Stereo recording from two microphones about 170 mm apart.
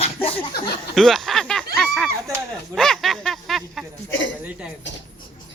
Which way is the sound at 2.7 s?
Centre (ahead or behind).